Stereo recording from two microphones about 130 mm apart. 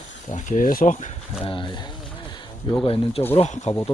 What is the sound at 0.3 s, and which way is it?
Speech, 75° left (ahead or behind).